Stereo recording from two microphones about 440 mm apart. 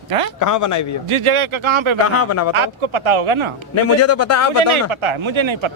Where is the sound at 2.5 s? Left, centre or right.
Right.